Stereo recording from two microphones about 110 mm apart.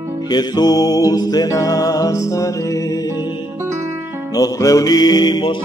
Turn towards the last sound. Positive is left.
turn(degrees=45)  # may be behind; listen again after turning